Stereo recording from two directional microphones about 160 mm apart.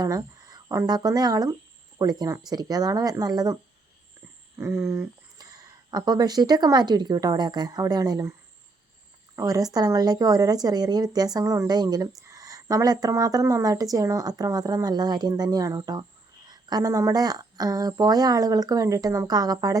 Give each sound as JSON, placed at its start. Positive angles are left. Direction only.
{"t": 0.0, "sound": "speech", "side_deg": -25}
{"t": 9.3, "sound": "speech", "side_deg": -20}